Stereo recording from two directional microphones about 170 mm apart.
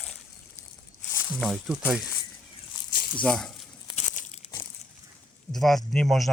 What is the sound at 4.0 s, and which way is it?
Crumpling, 40° left (ahead or behind).